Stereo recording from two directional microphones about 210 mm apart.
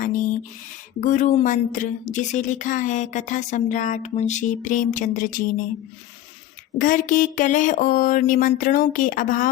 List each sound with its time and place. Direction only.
0.0 s a woman's voice: 40° left (ahead or behind)
6.7 s a woman's voice: 40° left (ahead or behind)